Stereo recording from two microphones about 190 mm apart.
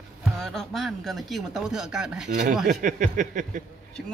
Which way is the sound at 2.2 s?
40° right (ahead or behind).